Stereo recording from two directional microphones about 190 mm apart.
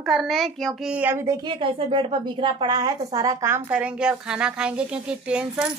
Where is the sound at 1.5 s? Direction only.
25° right (ahead or behind).